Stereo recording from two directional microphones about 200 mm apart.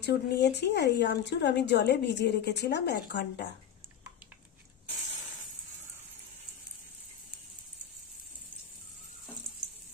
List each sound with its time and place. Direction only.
0.0 s speech: 60° left (ahead or behind)